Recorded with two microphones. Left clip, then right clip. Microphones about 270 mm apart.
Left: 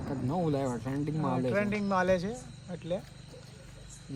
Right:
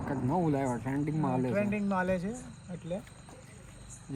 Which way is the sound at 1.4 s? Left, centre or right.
Left.